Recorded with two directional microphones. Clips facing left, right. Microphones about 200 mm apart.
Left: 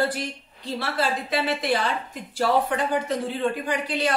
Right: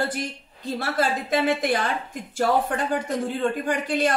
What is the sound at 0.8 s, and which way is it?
A woman's voice, 45° right (ahead or behind).